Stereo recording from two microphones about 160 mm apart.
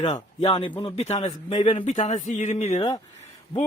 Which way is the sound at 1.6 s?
35° left (ahead or behind).